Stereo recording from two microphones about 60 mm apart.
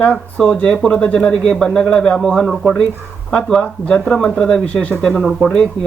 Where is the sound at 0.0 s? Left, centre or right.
Centre.